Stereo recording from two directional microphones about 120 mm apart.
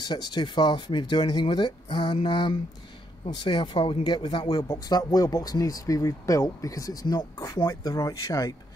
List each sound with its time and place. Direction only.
0.0 s speech: 35° left (ahead or behind)